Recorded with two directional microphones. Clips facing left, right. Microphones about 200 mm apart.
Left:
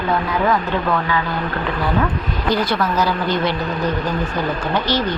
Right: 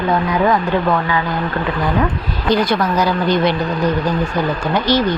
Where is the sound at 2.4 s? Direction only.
15° right (ahead or behind).